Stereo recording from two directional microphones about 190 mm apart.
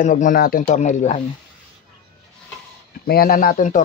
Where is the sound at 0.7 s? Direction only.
40° left (ahead or behind).